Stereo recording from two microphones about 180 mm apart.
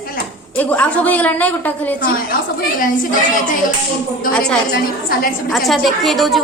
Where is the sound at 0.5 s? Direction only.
10° left (ahead or behind).